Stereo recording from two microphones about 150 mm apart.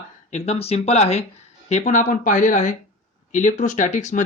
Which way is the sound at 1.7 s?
55° left (ahead or behind).